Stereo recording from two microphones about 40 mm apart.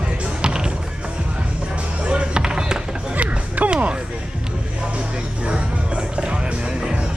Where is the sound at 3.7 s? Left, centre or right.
Right.